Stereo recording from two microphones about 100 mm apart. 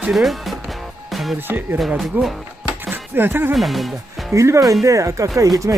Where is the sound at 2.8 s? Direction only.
20° right (ahead or behind).